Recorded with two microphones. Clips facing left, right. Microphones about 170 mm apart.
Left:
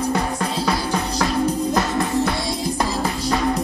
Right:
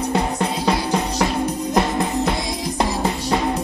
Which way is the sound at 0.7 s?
25° right (ahead or behind).